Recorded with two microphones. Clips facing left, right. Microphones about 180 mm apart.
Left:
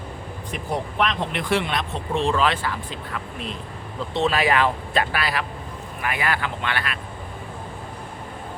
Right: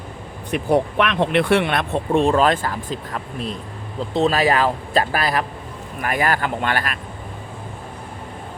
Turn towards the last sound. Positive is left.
turn(degrees=-45)  # may be behind; listen again after turning